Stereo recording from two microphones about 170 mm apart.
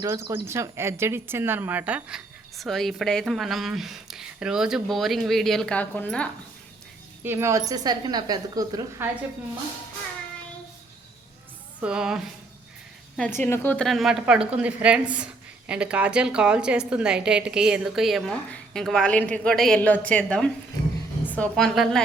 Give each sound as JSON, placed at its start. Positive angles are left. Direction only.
{"t": 0.0, "sound": "a woman's voice", "side_deg": -20}
{"t": 7.3, "sound": "a woman's voice", "side_deg": -15}
{"t": 11.8, "sound": "a woman's voice", "side_deg": -5}
{"t": 13.1, "sound": "a woman's voice", "side_deg": 10}